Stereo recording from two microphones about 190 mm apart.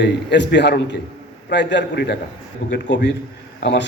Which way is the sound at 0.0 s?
65° left (ahead or behind).